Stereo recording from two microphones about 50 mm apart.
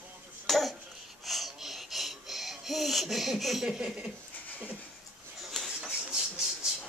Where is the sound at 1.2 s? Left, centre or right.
Centre.